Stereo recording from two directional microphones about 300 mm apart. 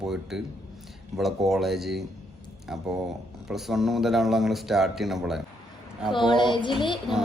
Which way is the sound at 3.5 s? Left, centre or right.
Centre.